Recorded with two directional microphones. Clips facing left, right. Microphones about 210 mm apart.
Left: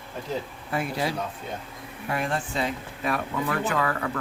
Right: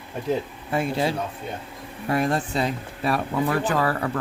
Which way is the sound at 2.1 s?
40° right (ahead or behind).